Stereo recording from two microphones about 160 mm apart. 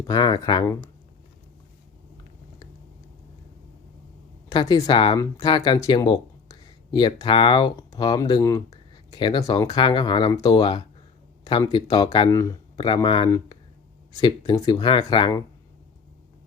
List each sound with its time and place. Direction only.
0.1 s speech: 25° left (ahead or behind)
4.4 s speech: 25° left (ahead or behind)